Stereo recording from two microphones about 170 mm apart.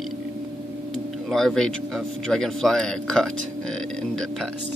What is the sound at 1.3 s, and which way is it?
A man's voice, 5° left (ahead or behind).